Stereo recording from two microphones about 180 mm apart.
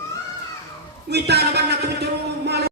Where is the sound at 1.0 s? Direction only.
65° right (ahead or behind).